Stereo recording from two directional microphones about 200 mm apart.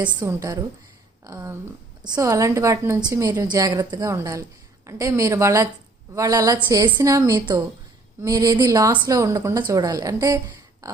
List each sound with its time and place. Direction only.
0.0 s a woman's voice: 20° right (ahead or behind)